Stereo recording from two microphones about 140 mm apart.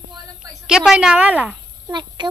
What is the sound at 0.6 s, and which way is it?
Speech, 5° right (ahead or behind).